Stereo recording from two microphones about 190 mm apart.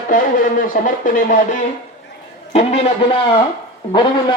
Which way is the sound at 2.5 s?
30° left (ahead or behind).